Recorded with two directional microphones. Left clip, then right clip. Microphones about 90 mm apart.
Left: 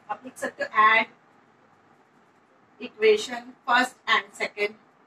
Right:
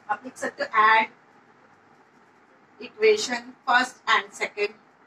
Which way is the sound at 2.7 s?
30° right (ahead or behind).